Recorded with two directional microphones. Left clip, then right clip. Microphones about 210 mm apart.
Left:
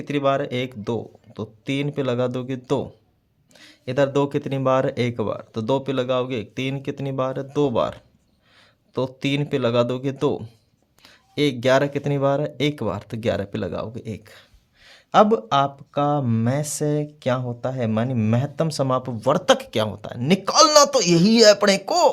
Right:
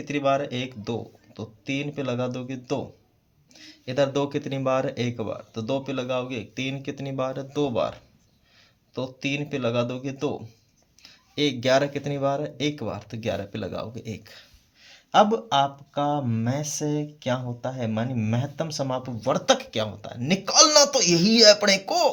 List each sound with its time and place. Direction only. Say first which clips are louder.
0.0 s speech: left 2 dB; 40° left (ahead or behind)